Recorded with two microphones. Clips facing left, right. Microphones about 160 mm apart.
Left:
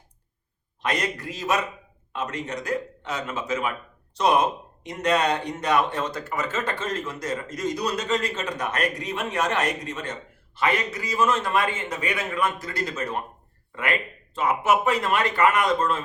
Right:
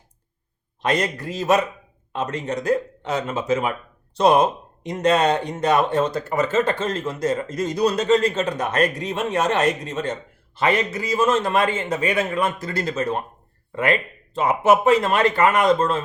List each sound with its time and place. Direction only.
0.8 s speech: 30° right (ahead or behind)
4.8 s speech: 30° right (ahead or behind)
14.3 s speech: 30° right (ahead or behind)